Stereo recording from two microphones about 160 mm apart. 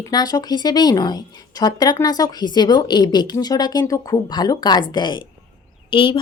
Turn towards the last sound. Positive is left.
turn(degrees=30)  # may be behind; listen again after turning